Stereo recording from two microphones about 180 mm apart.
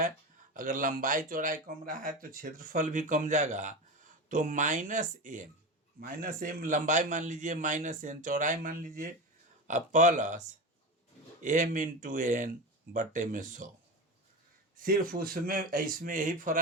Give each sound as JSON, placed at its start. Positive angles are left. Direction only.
{"t": 0.5, "sound": "speech", "side_deg": -50}
{"t": 11.4, "sound": "speech", "side_deg": -45}
{"t": 14.8, "sound": "speech", "side_deg": -50}